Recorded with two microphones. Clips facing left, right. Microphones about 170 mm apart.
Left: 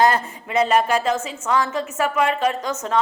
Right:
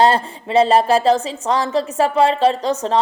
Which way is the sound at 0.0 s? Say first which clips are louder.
Right 3 dB; 30° right (ahead or behind).